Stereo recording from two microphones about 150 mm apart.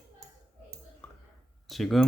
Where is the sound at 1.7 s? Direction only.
Centre (ahead or behind).